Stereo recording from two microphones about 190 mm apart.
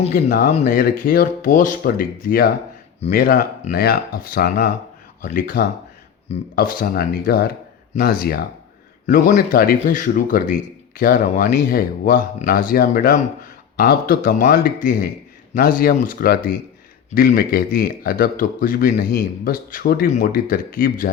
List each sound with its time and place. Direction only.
0.1 s speech: 50° left (ahead or behind)
0.5 s speech: 40° left (ahead or behind)
9.0 s speech: 45° left (ahead or behind)